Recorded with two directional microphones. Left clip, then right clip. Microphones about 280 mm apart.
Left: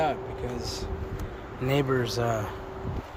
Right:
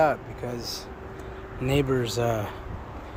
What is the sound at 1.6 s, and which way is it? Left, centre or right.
Speech, centre.